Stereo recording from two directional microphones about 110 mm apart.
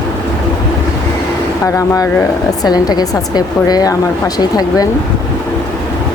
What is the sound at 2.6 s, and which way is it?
A woman's voice, 35° left (ahead or behind).